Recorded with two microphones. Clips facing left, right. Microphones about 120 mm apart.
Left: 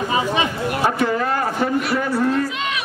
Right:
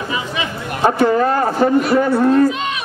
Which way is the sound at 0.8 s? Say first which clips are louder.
Right 7 dB; 35° right (ahead or behind).